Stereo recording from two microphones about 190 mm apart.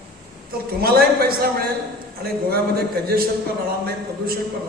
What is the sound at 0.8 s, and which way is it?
A man's voice, 55° right (ahead or behind).